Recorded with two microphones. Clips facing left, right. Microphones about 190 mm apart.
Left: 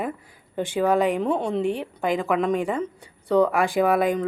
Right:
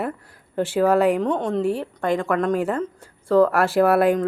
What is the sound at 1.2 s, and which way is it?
A woman's voice, 5° left (ahead or behind).